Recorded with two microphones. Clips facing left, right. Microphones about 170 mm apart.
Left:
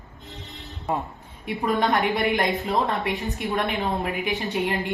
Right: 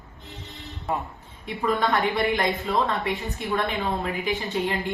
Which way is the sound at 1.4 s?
20° left (ahead or behind).